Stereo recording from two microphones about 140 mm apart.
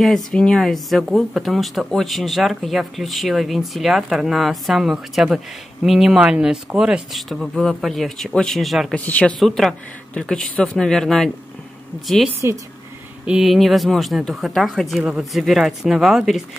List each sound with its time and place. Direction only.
0.0 s speech: 5° left (ahead or behind)
8.9 s speech: 10° left (ahead or behind)
12.4 s speech: 20° right (ahead or behind)
13.2 s speech: 5° right (ahead or behind)